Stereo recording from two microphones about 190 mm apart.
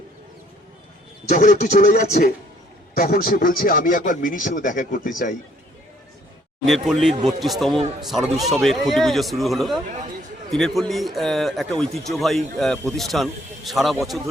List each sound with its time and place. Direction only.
1.3 s a man's voice: 40° left (ahead or behind)
6.7 s speech: centre (ahead or behind)